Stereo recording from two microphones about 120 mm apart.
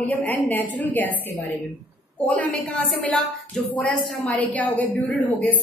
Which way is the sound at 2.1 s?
10° left (ahead or behind).